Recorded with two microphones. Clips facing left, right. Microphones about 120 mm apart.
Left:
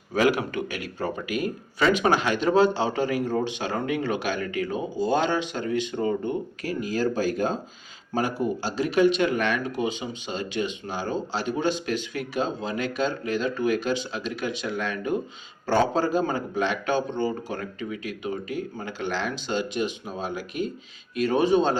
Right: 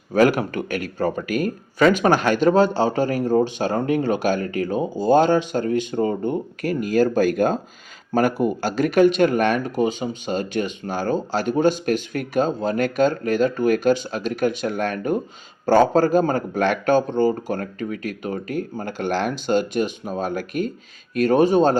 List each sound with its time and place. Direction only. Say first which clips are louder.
0.1 s speech: right 5 dB; 45° right (ahead or behind)
6.6 s speech: right 9 dB; 55° right (ahead or behind)